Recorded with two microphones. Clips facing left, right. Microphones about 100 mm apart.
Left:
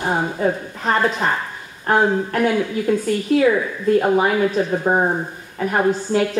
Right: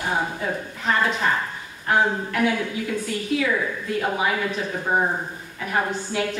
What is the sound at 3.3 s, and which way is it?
Speech, 40° left (ahead or behind).